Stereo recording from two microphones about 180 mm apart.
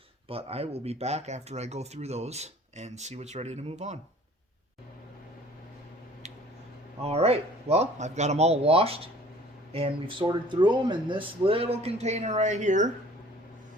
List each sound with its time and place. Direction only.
0.3 s speech: 35° right (ahead or behind)
7.0 s speech: 35° right (ahead or behind)